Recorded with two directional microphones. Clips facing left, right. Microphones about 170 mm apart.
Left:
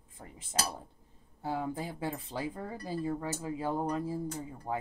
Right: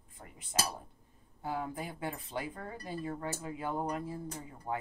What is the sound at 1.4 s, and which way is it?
Speech, 30° left (ahead or behind).